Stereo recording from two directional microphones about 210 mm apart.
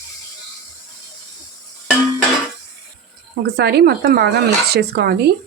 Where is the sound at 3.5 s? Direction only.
50° right (ahead or behind).